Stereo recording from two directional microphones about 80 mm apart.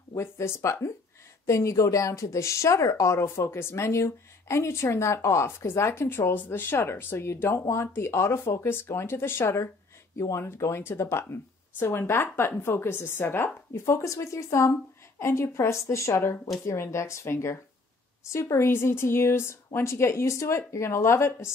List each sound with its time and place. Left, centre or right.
0.1 s a woman's voice: left